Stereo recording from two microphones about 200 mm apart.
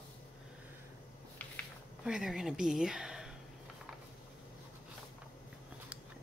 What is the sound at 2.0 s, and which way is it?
Speech, centre (ahead or behind).